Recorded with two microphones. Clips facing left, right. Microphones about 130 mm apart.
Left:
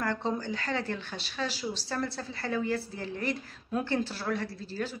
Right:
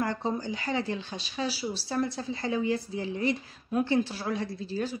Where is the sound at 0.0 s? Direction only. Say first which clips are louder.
Right 1 dB; 10° right (ahead or behind).